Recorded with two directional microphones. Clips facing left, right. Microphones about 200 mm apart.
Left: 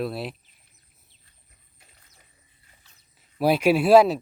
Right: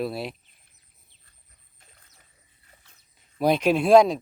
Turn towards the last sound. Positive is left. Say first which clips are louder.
# even
turn(degrees=5)  # may be behind; listen again after turning